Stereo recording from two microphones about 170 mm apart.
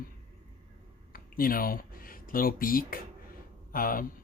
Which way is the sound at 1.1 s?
60° left (ahead or behind).